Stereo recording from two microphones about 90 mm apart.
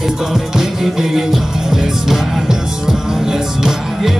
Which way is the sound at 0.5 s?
5° right (ahead or behind).